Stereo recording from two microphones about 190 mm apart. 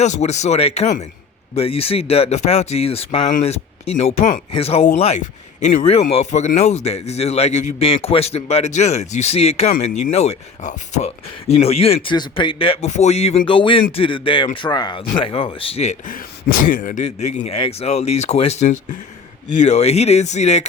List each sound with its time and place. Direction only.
0.0 s speech: 35° left (ahead or behind)